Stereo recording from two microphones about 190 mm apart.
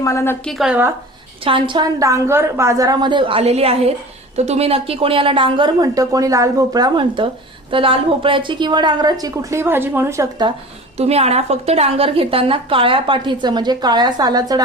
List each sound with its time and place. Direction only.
0.0 s a woman's voice: 15° left (ahead or behind)
0.4 s speech: 5° right (ahead or behind)
1.5 s a woman's voice: 25° right (ahead or behind)
10.9 s a woman's voice: 35° right (ahead or behind)